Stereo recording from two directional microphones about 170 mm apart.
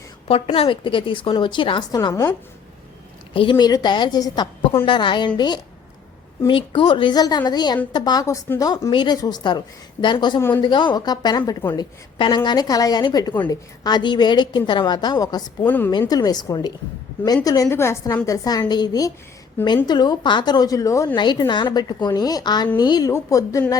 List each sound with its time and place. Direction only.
0.3 s a woman's voice: 35° left (ahead or behind)
3.3 s a woman's voice: 30° left (ahead or behind)
6.5 s a woman's voice: 30° left (ahead or behind)
15.6 s a woman's voice: 10° left (ahead or behind)
15.9 s a woman's voice: 25° left (ahead or behind)